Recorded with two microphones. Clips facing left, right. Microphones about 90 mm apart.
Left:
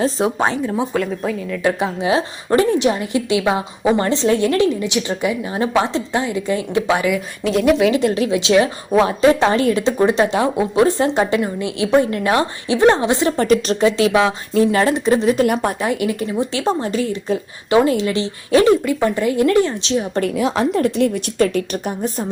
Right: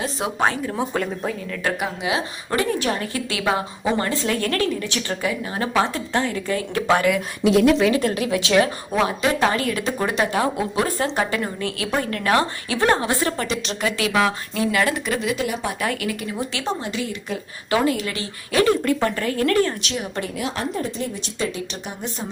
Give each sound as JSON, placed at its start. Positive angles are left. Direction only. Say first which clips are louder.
{"t": 0.0, "sound": "speech", "louder": "left 7 dB", "side_deg": 30}
{"t": 0.4, "sound": "a woman's voice", "louder": "left 3 dB", "side_deg": 20}
{"t": 0.9, "sound": "a woman's voice", "louder": "left 4 dB", "side_deg": 0}
{"t": 1.6, "sound": "a woman's voice", "louder": "left 6 dB", "side_deg": 30}
{"t": 7.9, "sound": "a woman's voice", "louder": "left 4 dB", "side_deg": 25}
{"t": 13.4, "sound": "speech", "louder": "left 11 dB", "side_deg": 40}
{"t": 13.8, "sound": "a woman's voice", "louder": "left 4 dB", "side_deg": 25}
{"t": 14.5, "sound": "speech", "louder": "left 6 dB", "side_deg": 35}
{"t": 15.4, "sound": "speech", "louder": "left 8 dB", "side_deg": 55}
{"t": 15.8, "sound": "a woman's voice", "louder": "left 5 dB", "side_deg": 25}
{"t": 20.7, "sound": "a woman's voice", "louder": "left 10 dB", "side_deg": 70}
{"t": 21.4, "sound": "a woman's voice", "louder": "left 8 dB", "side_deg": 50}